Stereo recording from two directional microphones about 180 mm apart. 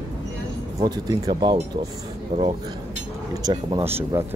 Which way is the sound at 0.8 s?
25° right (ahead or behind).